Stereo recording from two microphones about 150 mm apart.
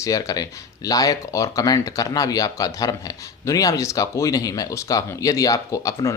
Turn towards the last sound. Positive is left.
turn(degrees=20)  # may be behind; listen again after turning